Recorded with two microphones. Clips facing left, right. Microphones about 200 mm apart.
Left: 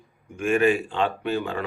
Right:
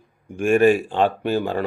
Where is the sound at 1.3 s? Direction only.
40° right (ahead or behind).